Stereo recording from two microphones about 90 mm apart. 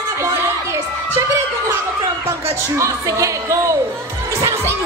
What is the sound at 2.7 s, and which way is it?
A woman's voice, 35° right (ahead or behind).